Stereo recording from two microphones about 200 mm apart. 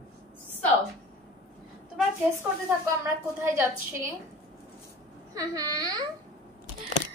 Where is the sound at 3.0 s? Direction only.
10° right (ahead or behind).